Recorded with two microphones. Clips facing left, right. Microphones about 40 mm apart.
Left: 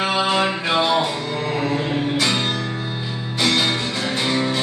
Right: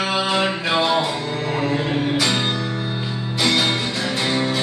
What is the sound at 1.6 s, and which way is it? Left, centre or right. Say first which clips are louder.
Music: right 2 dB; right.